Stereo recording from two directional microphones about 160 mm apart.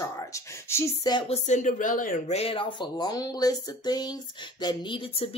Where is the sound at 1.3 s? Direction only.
50° left (ahead or behind).